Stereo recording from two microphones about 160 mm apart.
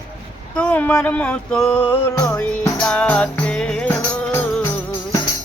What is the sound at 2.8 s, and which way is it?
Music, 5° left (ahead or behind).